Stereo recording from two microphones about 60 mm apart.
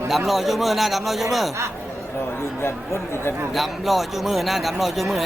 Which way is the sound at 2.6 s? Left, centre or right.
Left.